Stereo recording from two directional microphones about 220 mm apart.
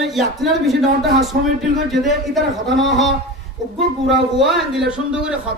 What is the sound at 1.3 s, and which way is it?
Speech, 45° right (ahead or behind).